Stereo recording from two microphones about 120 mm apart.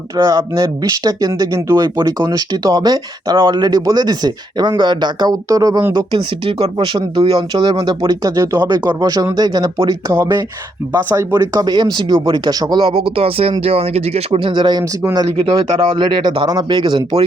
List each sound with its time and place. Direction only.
0.2 s speech: 30° right (ahead or behind)
5.9 s speech: 40° right (ahead or behind)
9.7 s speech: 25° right (ahead or behind)
13.1 s speech: 50° right (ahead or behind)